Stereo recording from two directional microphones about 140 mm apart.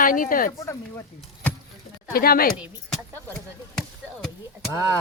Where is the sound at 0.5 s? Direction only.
20° left (ahead or behind).